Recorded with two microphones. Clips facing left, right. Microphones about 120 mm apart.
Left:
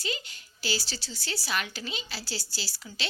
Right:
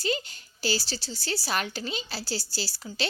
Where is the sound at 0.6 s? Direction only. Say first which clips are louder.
Right 4 dB; 35° right (ahead or behind).